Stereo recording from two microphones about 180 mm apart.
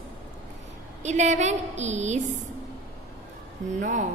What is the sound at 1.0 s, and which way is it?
A woman's voice, 40° right (ahead or behind).